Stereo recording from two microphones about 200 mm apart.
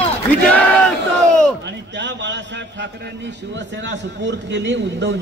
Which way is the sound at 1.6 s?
60° right (ahead or behind).